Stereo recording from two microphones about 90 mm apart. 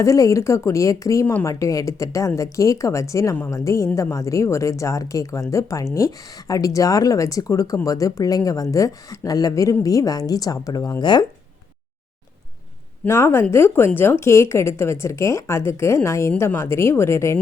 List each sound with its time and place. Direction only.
0.0 s a woman's voice: 35° left (ahead or behind)
11.0 s speech: 55° left (ahead or behind)
13.1 s speech: 30° left (ahead or behind)